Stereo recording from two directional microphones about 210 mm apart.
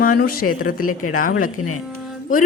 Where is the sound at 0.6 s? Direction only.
45° left (ahead or behind).